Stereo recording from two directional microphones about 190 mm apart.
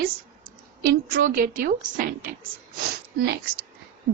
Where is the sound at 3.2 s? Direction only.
55° right (ahead or behind).